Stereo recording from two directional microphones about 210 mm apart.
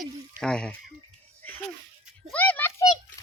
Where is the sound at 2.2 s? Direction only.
5° left (ahead or behind).